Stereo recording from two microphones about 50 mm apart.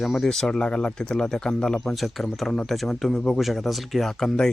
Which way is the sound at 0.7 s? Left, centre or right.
Centre.